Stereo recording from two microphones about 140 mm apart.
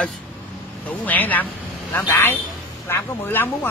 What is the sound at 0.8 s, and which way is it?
Speech, 10° left (ahead or behind).